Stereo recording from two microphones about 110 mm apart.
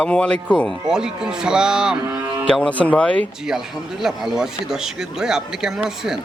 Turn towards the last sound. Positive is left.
turn(degrees=-5)  # may be behind; listen again after turning